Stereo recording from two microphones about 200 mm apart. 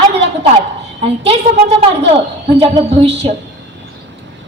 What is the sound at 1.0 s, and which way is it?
A woman's voice, 30° right (ahead or behind).